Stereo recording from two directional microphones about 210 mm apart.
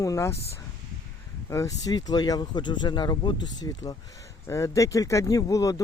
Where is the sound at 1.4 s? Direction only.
15° left (ahead or behind).